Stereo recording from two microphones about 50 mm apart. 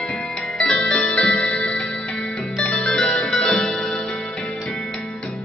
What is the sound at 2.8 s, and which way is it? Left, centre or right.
Music, centre.